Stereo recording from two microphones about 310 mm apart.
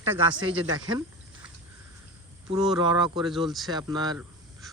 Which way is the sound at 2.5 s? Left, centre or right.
Centre.